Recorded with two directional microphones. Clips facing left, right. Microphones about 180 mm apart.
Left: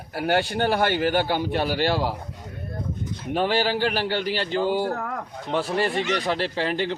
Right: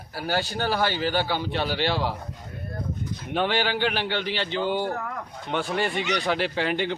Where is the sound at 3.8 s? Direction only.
40° left (ahead or behind).